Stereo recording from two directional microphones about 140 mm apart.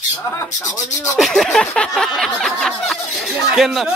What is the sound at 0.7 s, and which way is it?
Speech, 25° left (ahead or behind).